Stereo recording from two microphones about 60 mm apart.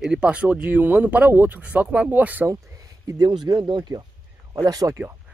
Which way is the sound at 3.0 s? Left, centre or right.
Right.